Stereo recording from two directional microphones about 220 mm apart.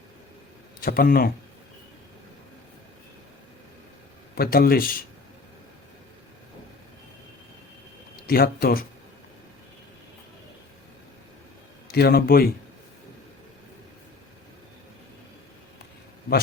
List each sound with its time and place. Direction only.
0.8 s speech: 40° left (ahead or behind)
4.4 s speech: 45° left (ahead or behind)
8.3 s speech: 40° left (ahead or behind)
11.9 s speech: 45° left (ahead or behind)